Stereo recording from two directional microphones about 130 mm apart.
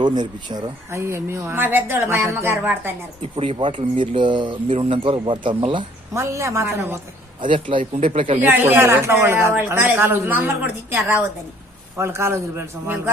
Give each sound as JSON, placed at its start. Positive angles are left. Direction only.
{"t": 0.0, "sound": "speech", "side_deg": -35}
{"t": 0.9, "sound": "speech", "side_deg": -20}
{"t": 3.3, "sound": "speech", "side_deg": -45}
{"t": 6.1, "sound": "speech", "side_deg": -20}
{"t": 7.4, "sound": "speech", "side_deg": -40}
{"t": 8.4, "sound": "speech", "side_deg": -15}